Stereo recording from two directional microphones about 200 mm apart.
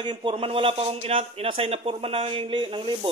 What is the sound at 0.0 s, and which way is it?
Speech, 25° right (ahead or behind).